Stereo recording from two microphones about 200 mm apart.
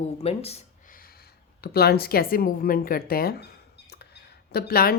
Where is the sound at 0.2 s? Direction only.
30° left (ahead or behind).